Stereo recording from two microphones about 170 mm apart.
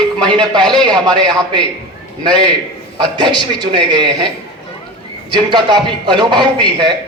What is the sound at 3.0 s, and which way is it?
A man's voice, 25° right (ahead or behind).